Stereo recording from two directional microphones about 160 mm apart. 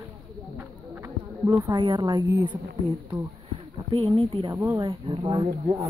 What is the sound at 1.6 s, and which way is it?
Speech, 30° right (ahead or behind).